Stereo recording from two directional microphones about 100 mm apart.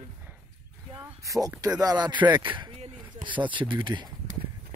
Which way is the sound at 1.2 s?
35° right (ahead or behind).